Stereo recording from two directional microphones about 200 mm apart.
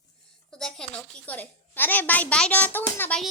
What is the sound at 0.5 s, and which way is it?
A woman's voice, 5° left (ahead or behind).